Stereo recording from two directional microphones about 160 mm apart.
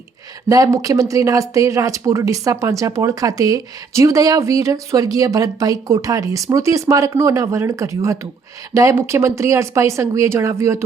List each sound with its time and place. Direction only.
0.4 s speech: 20° right (ahead or behind)